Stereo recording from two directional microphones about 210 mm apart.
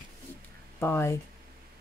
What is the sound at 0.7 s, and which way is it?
Speech, 10° left (ahead or behind).